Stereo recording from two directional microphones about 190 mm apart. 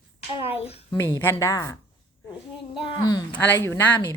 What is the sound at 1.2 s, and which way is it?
Speech, 15° left (ahead or behind).